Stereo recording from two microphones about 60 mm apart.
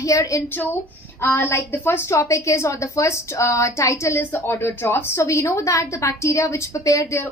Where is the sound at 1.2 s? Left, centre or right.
Left.